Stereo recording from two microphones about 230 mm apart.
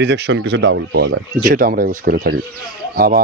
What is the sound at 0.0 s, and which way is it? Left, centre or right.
A man's voice, right.